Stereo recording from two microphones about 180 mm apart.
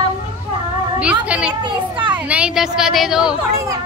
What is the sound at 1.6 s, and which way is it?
Speech, 25° right (ahead or behind).